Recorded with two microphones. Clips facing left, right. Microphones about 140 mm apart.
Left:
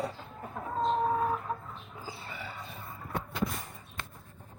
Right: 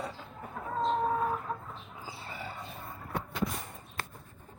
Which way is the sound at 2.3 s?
40° right (ahead or behind).